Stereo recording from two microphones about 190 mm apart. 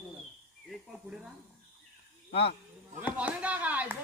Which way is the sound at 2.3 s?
60° left (ahead or behind).